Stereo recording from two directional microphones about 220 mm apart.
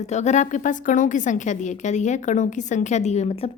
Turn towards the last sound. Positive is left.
turn(degrees=30)  # may be behind; listen again after turning